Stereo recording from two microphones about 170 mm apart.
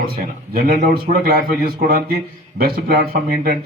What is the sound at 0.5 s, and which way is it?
Speech, 60° right (ahead or behind).